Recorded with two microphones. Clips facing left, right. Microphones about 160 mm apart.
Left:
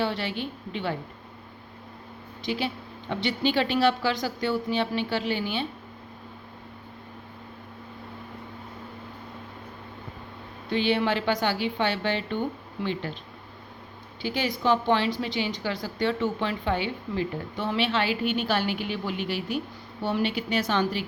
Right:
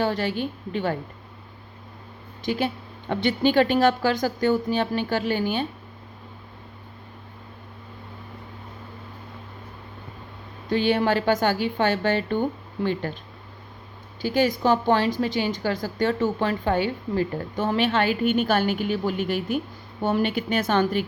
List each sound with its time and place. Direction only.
0.0 s a woman's voice: 45° right (ahead or behind)
2.4 s a woman's voice: 45° right (ahead or behind)
10.7 s a woman's voice: 45° right (ahead or behind)
14.2 s a woman's voice: 45° right (ahead or behind)